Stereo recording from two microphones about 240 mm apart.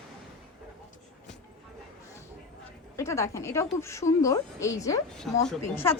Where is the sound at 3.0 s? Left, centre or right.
Centre.